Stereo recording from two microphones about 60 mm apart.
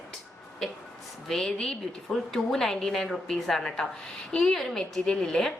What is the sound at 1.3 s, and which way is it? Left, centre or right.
A woman's voice, centre.